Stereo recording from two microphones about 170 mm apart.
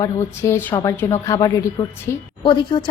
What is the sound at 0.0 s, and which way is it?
A woman's voice, 15° left (ahead or behind).